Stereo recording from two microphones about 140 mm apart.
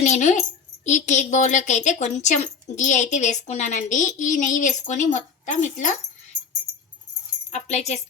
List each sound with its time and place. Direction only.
0.0 s a woman's voice: 55° left (ahead or behind)
7.5 s a woman's voice: 55° left (ahead or behind)